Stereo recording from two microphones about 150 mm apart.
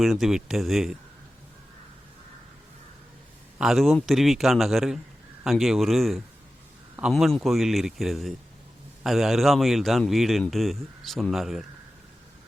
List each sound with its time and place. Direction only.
0.0 s a man's voice: centre (ahead or behind)
3.6 s a man's voice: centre (ahead or behind)